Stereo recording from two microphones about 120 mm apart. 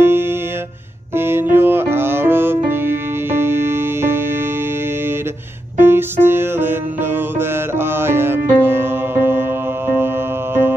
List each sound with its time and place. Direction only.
0.0 s music: 20° right (ahead or behind)
5.8 s music: 20° right (ahead or behind)